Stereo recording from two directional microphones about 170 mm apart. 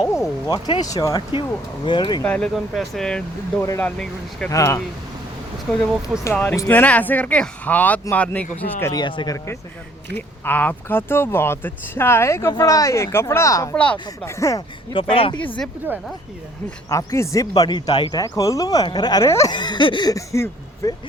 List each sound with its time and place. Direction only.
0.4 s speech: 25° left (ahead or behind)
2.2 s speech: 5° left (ahead or behind)
4.5 s speech: 20° left (ahead or behind)
6.3 s speech: 10° left (ahead or behind)
10.2 s speech: 10° left (ahead or behind)
14.9 s speech: 30° left (ahead or behind)
16.9 s speech: 20° left (ahead or behind)